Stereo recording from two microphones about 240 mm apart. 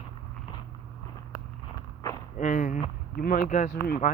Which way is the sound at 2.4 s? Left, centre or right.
Left.